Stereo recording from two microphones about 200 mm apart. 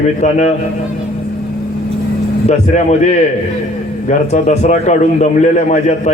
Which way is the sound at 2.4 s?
35° left (ahead or behind).